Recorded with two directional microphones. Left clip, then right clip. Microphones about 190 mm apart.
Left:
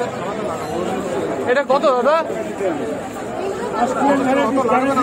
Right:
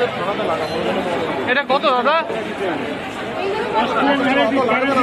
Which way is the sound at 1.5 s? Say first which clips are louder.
Left 2 dB; 90° left.